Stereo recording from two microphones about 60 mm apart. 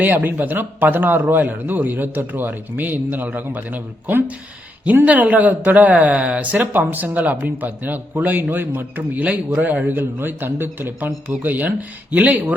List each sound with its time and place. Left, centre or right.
0.0 s a man's voice: right